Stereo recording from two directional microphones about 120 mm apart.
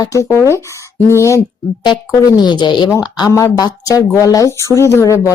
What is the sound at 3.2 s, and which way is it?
Speech, 25° left (ahead or behind).